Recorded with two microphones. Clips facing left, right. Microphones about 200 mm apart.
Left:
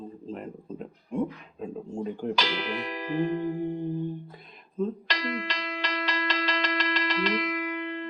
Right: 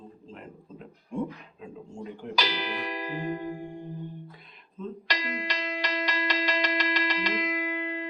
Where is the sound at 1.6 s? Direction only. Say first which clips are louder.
Left 8 dB; 40° left (ahead or behind).